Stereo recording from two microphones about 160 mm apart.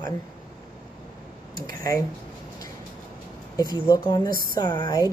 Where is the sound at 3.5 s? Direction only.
25° left (ahead or behind).